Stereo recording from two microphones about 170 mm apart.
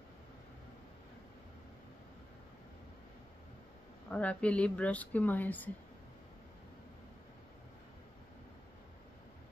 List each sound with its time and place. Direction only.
4.1 s a woman's voice: 5° left (ahead or behind)